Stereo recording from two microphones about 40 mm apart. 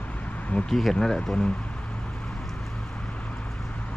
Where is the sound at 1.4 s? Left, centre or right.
Left.